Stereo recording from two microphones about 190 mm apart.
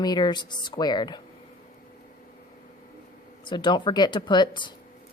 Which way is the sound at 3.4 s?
25° left (ahead or behind).